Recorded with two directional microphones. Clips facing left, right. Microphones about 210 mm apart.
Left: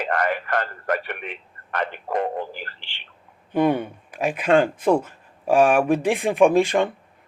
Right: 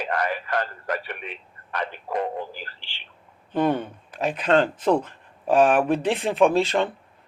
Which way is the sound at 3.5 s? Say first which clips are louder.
Left 3 dB; 10° left (ahead or behind).